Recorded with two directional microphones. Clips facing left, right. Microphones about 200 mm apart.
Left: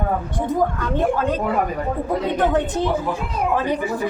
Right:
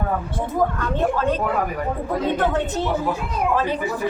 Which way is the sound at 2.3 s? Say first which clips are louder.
Left 2 dB; 15° left (ahead or behind).